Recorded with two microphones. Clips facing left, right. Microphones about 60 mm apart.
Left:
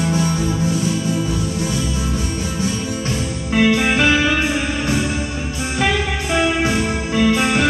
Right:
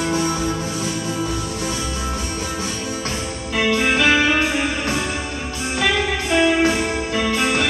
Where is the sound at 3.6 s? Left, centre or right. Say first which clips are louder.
Left 1 dB; centre.